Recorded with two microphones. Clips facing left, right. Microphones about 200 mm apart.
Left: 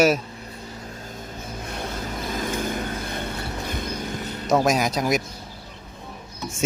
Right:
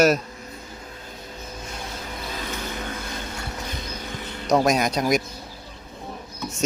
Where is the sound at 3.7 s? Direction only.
40° left (ahead or behind).